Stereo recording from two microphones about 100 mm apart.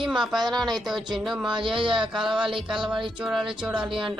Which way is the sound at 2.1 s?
5° right (ahead or behind).